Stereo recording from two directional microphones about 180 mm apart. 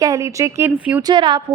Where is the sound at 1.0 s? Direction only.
25° right (ahead or behind).